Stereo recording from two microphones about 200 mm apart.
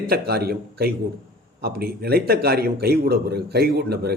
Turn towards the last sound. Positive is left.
turn(degrees=-55)  # may be behind; listen again after turning